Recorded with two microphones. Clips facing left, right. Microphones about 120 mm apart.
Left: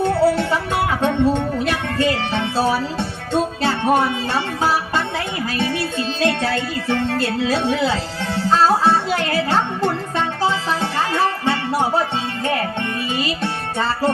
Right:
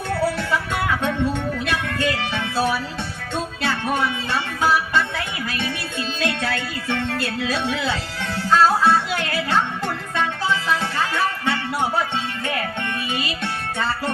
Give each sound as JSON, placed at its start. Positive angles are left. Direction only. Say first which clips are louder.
{"t": 0.0, "sound": "music", "louder": "left 7 dB", "side_deg": 30}